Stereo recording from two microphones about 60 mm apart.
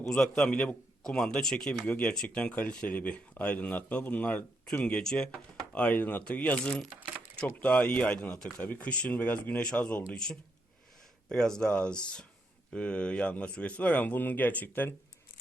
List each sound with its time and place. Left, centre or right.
0.1 s a man's voice: centre
11.3 s a man's voice: centre; by 14.9 s left